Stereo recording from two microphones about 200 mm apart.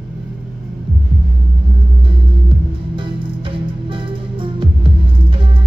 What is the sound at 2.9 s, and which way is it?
Music, 25° right (ahead or behind).